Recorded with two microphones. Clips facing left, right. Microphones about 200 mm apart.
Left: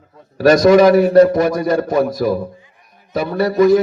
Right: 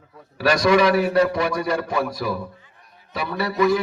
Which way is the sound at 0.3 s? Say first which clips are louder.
Left 8 dB; 40° left (ahead or behind).